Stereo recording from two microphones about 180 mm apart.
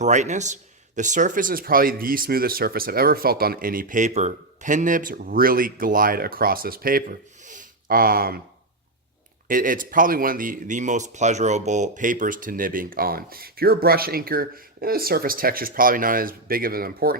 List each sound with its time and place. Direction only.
0.0 s speech: 40° right (ahead or behind)
9.5 s speech: 50° right (ahead or behind)